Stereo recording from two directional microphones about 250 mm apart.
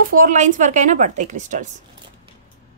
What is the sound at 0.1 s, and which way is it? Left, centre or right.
A woman's voice, right.